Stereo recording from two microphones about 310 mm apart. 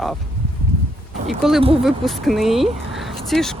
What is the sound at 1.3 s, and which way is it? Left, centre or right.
Speech, centre.